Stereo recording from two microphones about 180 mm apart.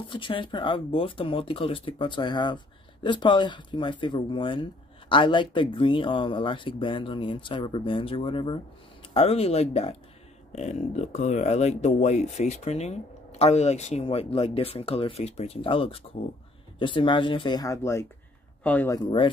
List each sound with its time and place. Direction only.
0.1 s speech: 30° left (ahead or behind); by 18.9 s 10° left (ahead or behind)